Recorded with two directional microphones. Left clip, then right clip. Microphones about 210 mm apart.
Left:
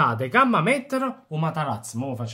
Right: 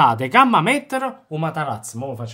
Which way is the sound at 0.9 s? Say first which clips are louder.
Right 3 dB; 30° right (ahead or behind).